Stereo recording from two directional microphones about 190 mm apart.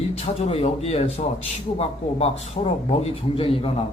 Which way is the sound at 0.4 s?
30° left (ahead or behind).